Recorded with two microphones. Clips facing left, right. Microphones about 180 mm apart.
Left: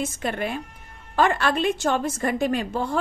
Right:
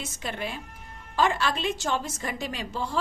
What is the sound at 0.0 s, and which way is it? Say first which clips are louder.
A woman's voice: left 7 dB; 50° left (ahead or behind).